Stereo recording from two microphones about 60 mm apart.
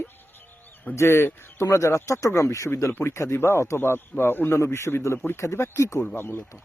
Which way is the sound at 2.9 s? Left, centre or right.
Left.